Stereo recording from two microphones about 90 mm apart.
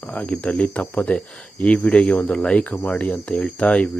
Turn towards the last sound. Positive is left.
turn(degrees=15)  # may be behind; listen again after turning